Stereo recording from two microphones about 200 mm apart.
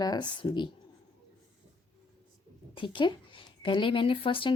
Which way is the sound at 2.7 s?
25° left (ahead or behind).